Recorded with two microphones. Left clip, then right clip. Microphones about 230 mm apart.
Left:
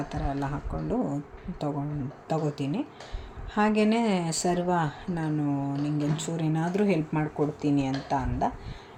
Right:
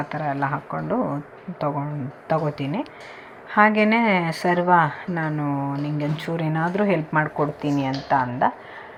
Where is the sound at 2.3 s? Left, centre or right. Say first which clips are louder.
Right 7 dB; centre.